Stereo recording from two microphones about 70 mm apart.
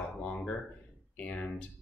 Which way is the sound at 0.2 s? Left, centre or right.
Centre.